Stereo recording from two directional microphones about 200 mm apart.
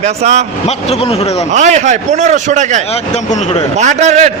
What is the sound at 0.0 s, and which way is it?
Speech, 35° right (ahead or behind).